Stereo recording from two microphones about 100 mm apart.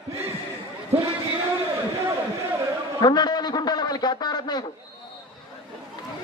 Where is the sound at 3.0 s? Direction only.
45° left (ahead or behind).